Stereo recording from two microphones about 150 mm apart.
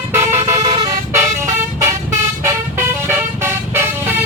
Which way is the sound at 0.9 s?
20° right (ahead or behind).